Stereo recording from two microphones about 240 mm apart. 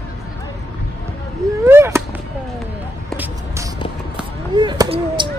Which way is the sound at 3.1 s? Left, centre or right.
Centre.